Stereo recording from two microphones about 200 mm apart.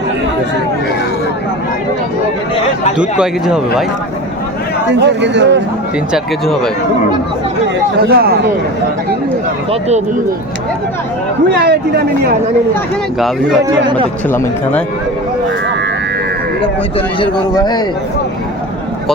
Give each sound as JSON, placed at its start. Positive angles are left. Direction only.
{"t": 3.0, "sound": "speech", "side_deg": -5}
{"t": 4.9, "sound": "speech", "side_deg": -60}
{"t": 6.1, "sound": "speech", "side_deg": 0}
{"t": 8.0, "sound": "speech", "side_deg": -50}
{"t": 11.5, "sound": "speech", "side_deg": -55}
{"t": 13.8, "sound": "a man's voice", "side_deg": -25}
{"t": 14.3, "sound": "speech", "side_deg": 10}
{"t": 17.2, "sound": "a man's voice", "side_deg": 20}